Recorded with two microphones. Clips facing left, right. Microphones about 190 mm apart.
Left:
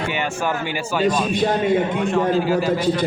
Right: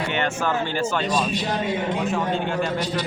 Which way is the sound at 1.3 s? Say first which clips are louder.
Left 6 dB; 50° left (ahead or behind).